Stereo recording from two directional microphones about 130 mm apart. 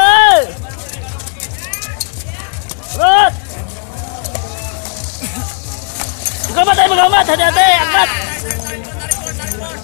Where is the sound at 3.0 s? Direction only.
70° left (ahead or behind).